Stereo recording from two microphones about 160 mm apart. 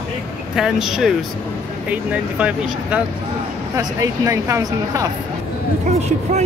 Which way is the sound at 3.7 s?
20° right (ahead or behind).